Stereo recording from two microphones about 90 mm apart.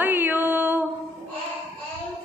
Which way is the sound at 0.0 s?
20° right (ahead or behind).